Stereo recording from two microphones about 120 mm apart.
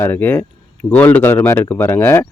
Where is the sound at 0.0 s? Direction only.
15° left (ahead or behind).